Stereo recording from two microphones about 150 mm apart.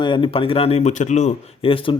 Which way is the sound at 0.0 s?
35° left (ahead or behind).